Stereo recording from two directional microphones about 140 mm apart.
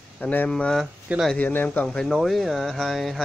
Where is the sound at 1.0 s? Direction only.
5° right (ahead or behind).